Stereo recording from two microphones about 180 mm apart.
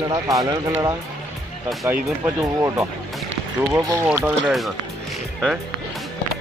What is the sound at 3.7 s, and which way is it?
Speech, 20° right (ahead or behind).